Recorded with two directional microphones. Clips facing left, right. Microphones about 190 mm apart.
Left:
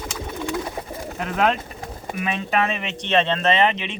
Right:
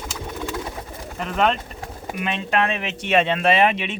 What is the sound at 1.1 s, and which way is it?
Speech, 5° left (ahead or behind).